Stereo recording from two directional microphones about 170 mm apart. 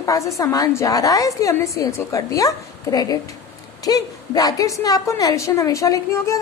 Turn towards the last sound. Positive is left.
turn(degrees=15)  # may be behind; listen again after turning